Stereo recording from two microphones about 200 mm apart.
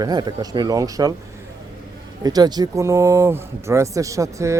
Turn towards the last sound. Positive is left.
turn(degrees=-15)  # may be behind; listen again after turning